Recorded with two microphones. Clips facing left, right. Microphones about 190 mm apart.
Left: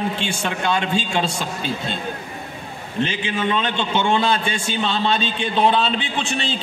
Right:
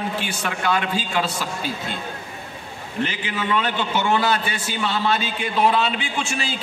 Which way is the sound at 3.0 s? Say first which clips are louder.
Left 3 dB; 25° left (ahead or behind).